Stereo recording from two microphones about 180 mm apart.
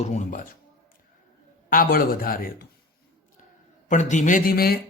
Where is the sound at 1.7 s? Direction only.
50° left (ahead or behind).